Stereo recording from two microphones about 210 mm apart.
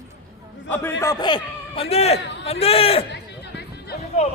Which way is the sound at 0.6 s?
10° left (ahead or behind).